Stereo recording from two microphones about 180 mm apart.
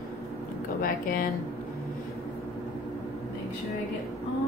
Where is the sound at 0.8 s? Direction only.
55° left (ahead or behind).